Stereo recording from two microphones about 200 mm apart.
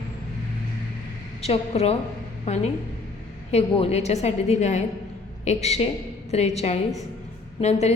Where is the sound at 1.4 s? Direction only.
30° left (ahead or behind).